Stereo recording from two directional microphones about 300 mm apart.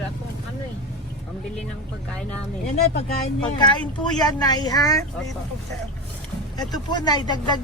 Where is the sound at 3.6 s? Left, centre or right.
Centre.